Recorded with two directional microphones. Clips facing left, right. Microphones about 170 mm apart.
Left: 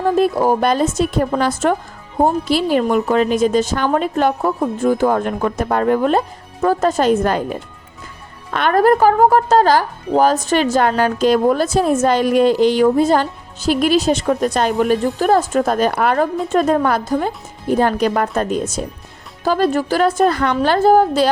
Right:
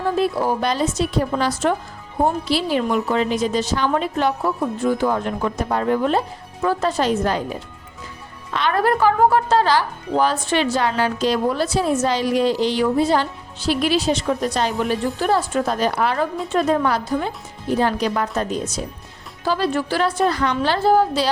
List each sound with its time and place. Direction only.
0.2 s speech: 45° left (ahead or behind)